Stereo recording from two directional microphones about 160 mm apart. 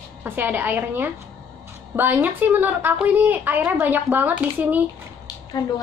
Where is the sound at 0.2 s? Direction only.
15° right (ahead or behind).